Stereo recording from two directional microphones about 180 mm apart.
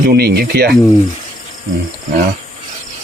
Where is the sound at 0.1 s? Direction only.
60° right (ahead or behind).